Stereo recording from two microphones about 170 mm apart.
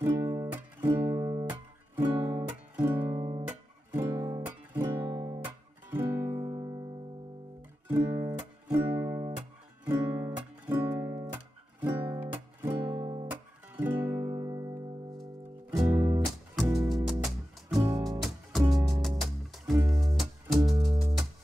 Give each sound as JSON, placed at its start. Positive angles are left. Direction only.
{"t": 0.0, "sound": "music", "side_deg": -20}
{"t": 6.3, "sound": "music", "side_deg": -25}
{"t": 7.9, "sound": "music", "side_deg": -15}
{"t": 13.0, "sound": "music", "side_deg": -25}
{"t": 13.3, "sound": "music", "side_deg": -10}
{"t": 14.1, "sound": "music", "side_deg": -25}
{"t": 15.9, "sound": "music", "side_deg": -20}
{"t": 16.9, "sound": "music", "side_deg": 0}
{"t": 17.7, "sound": "music", "side_deg": -20}
{"t": 18.9, "sound": "music", "side_deg": 0}